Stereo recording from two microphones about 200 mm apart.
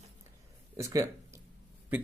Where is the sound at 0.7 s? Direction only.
15° right (ahead or behind).